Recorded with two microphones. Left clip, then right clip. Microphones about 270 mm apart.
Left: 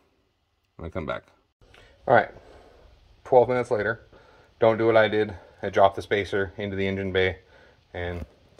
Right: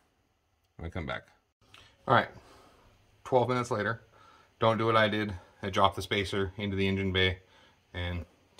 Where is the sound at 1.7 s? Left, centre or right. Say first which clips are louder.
Left 6 dB; centre.